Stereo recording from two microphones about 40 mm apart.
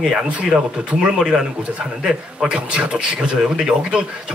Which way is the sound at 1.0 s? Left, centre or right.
Centre.